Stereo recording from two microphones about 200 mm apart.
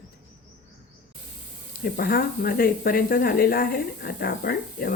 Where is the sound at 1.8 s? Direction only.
50° left (ahead or behind).